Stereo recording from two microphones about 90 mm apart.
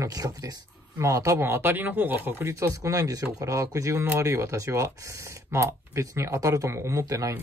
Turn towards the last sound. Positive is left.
turn(degrees=-40)  # may be behind; listen again after turning